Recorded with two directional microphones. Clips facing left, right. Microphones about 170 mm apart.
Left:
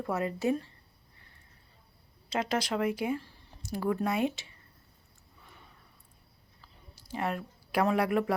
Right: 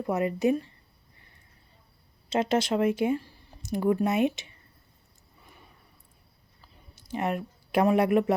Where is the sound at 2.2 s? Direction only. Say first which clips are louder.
Right 6 dB; 25° right (ahead or behind).